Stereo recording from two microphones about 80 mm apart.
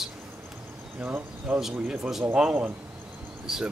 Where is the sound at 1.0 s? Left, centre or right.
Centre.